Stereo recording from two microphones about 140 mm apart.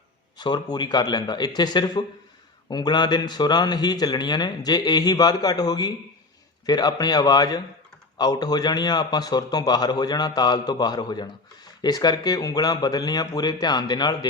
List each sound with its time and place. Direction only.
0.3 s a man's voice: 30° left (ahead or behind)